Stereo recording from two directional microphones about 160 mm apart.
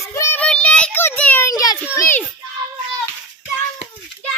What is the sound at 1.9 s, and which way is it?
Children playing, 15° left (ahead or behind).